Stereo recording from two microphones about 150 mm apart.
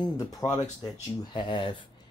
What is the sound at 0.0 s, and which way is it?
Speech, 25° left (ahead or behind).